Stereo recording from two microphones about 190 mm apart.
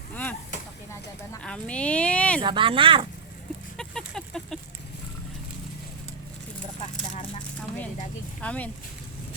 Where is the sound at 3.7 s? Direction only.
5° left (ahead or behind).